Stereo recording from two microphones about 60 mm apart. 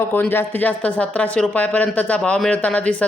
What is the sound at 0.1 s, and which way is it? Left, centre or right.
A man's voice, left.